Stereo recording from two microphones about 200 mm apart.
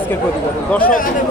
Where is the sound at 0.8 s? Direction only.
45° left (ahead or behind).